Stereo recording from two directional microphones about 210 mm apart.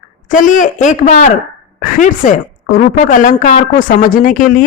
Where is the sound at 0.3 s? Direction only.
35° left (ahead or behind).